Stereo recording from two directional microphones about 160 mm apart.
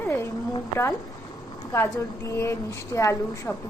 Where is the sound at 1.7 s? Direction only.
20° left (ahead or behind).